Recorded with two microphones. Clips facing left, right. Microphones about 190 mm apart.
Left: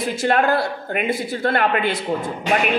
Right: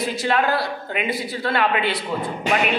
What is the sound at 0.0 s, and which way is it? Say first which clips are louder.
A woman's voice: left 2 dB; 50° left (ahead or behind).